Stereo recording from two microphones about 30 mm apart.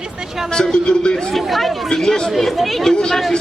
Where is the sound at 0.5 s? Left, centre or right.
Left.